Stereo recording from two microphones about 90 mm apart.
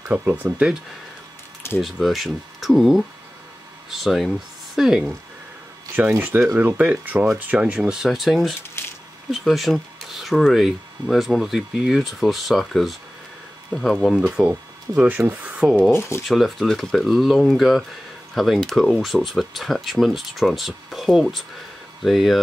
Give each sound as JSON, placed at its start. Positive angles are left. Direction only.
{"t": 0.0, "sound": "speech", "side_deg": -20}
{"t": 2.0, "sound": "speech", "side_deg": 0}
{"t": 5.9, "sound": "speech", "side_deg": -20}
{"t": 8.8, "sound": "a sound", "side_deg": 25}
{"t": 9.3, "sound": "speech", "side_deg": 0}
{"t": 15.0, "sound": "speech", "side_deg": -20}
{"t": 15.9, "sound": "speech", "side_deg": 30}
{"t": 16.3, "sound": "speech", "side_deg": 0}